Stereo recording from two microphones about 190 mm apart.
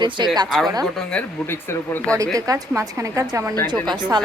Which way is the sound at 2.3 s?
20° right (ahead or behind).